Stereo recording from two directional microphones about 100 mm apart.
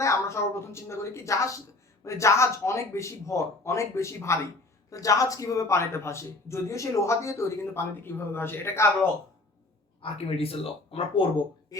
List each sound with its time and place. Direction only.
0.0 s a man's voice: 30° left (ahead or behind)
10.0 s speech: 75° left (ahead or behind)
11.7 s speech: 35° left (ahead or behind)